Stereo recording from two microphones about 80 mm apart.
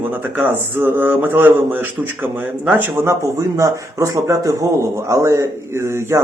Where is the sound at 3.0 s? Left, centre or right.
Right.